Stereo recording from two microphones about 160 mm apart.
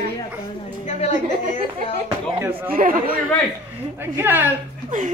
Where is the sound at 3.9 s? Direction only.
15° right (ahead or behind).